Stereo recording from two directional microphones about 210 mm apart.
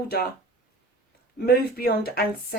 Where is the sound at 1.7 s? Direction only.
45° left (ahead or behind).